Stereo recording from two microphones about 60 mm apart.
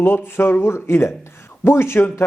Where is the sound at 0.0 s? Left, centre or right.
Left.